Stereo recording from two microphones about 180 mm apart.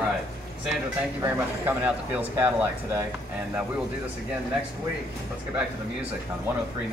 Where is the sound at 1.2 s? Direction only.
10° right (ahead or behind).